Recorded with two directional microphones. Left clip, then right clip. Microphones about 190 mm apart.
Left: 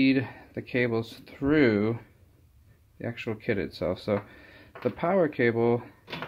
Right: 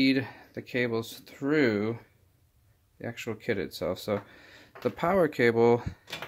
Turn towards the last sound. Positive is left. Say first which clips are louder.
# right 2 dB
turn(degrees=-35)  # may be behind; listen again after turning